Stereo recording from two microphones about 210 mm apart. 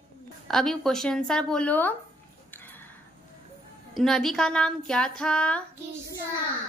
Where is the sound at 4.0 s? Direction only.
Centre (ahead or behind).